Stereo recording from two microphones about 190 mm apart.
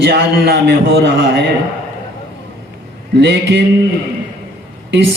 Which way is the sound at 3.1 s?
65° right (ahead or behind).